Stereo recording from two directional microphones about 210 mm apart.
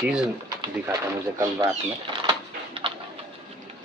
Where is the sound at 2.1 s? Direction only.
25° right (ahead or behind).